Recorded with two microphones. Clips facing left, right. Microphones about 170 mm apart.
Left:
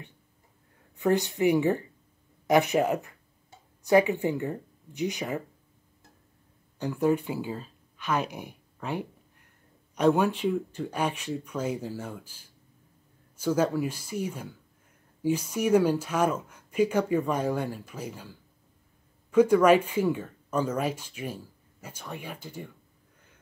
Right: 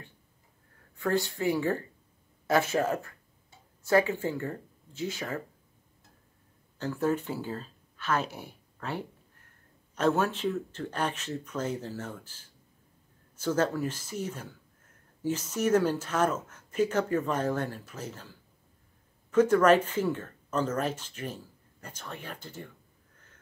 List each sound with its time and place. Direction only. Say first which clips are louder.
0.9 s speech: left 4 dB; 20° left (ahead or behind)
6.8 s speech: left 3 dB; 15° left (ahead or behind)
19.3 s speech: left 2 dB; 10° left (ahead or behind)